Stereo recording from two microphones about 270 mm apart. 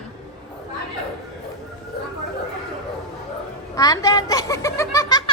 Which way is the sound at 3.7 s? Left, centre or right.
Centre.